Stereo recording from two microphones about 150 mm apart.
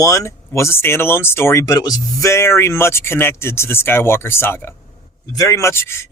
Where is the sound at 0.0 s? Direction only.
20° left (ahead or behind).